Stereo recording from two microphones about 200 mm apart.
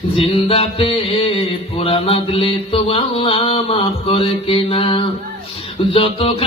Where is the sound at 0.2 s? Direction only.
25° left (ahead or behind).